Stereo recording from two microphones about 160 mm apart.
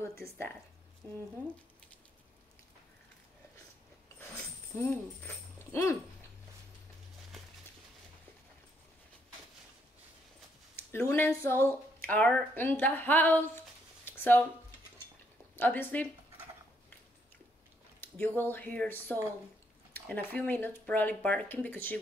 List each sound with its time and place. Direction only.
0.2 s speech: 15° left (ahead or behind)
4.7 s speech: 15° left (ahead or behind)
10.9 s speech: 15° left (ahead or behind)
14.0 s a sound: 15° left (ahead or behind)
15.5 s speech: 10° left (ahead or behind)
18.0 s speech: 10° left (ahead or behind)